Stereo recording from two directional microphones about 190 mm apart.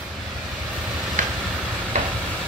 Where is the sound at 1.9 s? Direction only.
40° right (ahead or behind).